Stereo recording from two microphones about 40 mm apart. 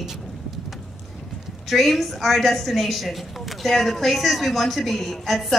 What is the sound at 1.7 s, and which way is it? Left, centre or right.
A woman's voice, centre.